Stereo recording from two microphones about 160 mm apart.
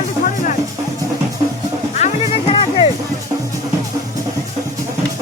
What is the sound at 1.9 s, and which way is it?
Music, 45° left (ahead or behind).